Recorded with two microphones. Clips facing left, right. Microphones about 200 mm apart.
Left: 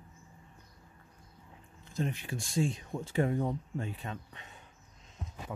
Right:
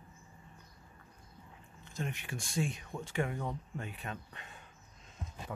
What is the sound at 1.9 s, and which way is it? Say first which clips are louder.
Speech: left 5 dB; 30° left (ahead or behind).